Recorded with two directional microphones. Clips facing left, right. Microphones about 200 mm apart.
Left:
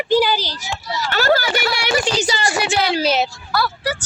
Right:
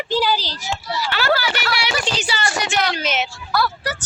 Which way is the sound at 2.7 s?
30° left (ahead or behind).